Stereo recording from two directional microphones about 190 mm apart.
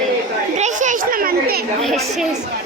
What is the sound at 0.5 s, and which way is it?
A child's voice, 40° right (ahead or behind).